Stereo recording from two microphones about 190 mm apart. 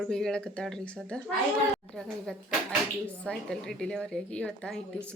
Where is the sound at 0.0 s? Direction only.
5° left (ahead or behind).